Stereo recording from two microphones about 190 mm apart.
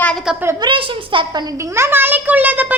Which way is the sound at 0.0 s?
5° left (ahead or behind).